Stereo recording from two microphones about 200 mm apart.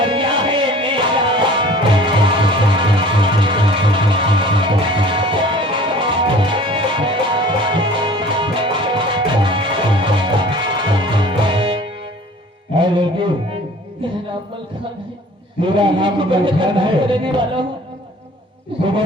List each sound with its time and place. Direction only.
0.0 s music: 25° right (ahead or behind)
15.6 s a man's voice: 25° right (ahead or behind)